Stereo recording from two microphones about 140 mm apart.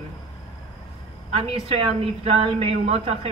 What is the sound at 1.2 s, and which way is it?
A woman's voice, 45° right (ahead or behind).